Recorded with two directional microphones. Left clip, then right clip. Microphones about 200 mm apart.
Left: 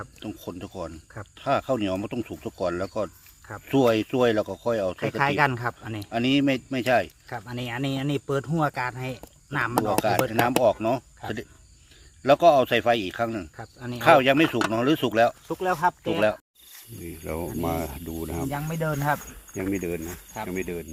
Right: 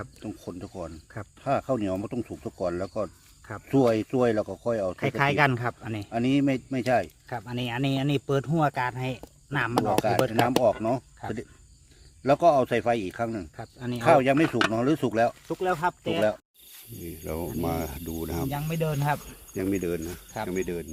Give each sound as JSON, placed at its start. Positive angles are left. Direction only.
{"t": 0.2, "sound": "speech", "side_deg": -5}
{"t": 4.9, "sound": "speech", "side_deg": -30}
{"t": 6.1, "sound": "speech", "side_deg": 0}
{"t": 7.3, "sound": "speech", "side_deg": -20}
{"t": 10.3, "sound": "speech", "side_deg": -5}
{"t": 12.2, "sound": "speech", "side_deg": -5}
{"t": 13.6, "sound": "speech", "side_deg": -20}
{"t": 14.0, "sound": "speech", "side_deg": -5}
{"t": 15.4, "sound": "speech", "side_deg": -15}
{"t": 19.7, "sound": "speech", "side_deg": -10}